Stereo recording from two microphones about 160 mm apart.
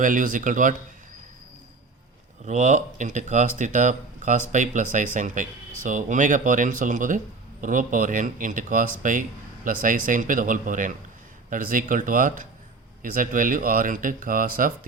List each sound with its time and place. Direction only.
0.0 s speech: 55° right (ahead or behind)
2.4 s speech: 45° right (ahead or behind)